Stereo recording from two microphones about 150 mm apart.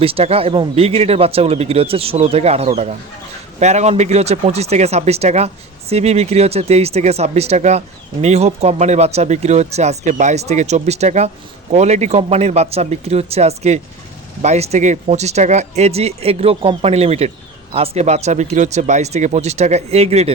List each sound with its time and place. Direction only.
0.0 s speech: 40° right (ahead or behind)